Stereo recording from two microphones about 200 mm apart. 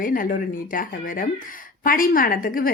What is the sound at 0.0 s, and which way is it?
A woman's voice, 45° left (ahead or behind).